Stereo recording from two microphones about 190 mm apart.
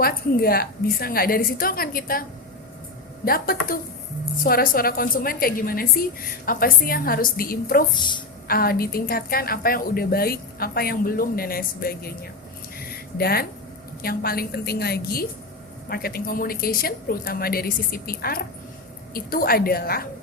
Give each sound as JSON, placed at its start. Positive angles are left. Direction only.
{"t": 0.0, "sound": "a woman's voice", "side_deg": 50}
{"t": 3.2, "sound": "a woman's voice", "side_deg": 50}
{"t": 7.9, "sound": "a woman's voice", "side_deg": 25}
{"t": 8.4, "sound": "a woman's voice", "side_deg": 50}
{"t": 12.8, "sound": "a sound", "side_deg": 55}
{"t": 14.0, "sound": "a woman's voice", "side_deg": 50}